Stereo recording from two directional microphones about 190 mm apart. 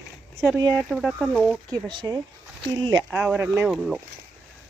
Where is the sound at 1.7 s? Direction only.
20° right (ahead or behind).